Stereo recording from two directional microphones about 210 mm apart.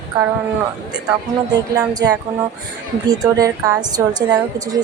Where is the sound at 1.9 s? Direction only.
20° right (ahead or behind).